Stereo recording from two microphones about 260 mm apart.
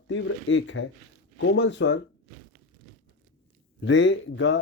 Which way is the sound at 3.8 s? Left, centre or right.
Left.